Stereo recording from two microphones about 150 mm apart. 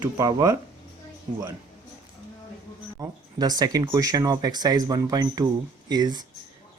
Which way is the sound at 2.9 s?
25° right (ahead or behind).